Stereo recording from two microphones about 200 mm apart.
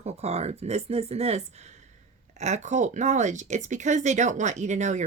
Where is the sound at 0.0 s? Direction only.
30° right (ahead or behind).